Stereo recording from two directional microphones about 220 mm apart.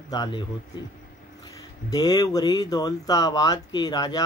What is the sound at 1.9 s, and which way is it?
Speech, 15° left (ahead or behind).